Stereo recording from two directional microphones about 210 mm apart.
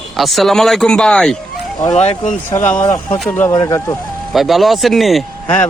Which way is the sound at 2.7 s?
15° left (ahead or behind).